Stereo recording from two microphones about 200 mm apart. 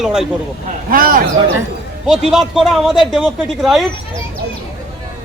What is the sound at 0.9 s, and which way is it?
Speech, 45° right (ahead or behind).